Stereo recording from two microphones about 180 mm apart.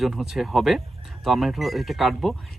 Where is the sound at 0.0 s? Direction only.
Centre (ahead or behind).